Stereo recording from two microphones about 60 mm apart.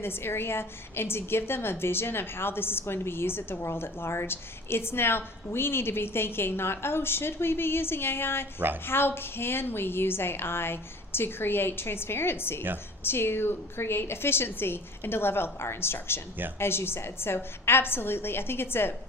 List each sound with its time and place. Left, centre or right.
0.0 s a woman's voice: left
8.5 s a woman's voice: right
8.9 s a woman's voice: left